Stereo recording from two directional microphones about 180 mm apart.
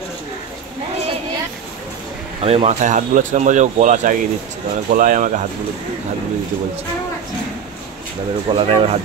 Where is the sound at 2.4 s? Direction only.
35° right (ahead or behind).